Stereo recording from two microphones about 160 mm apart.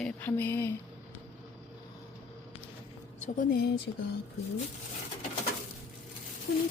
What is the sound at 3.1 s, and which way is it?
Speech, 50° left (ahead or behind).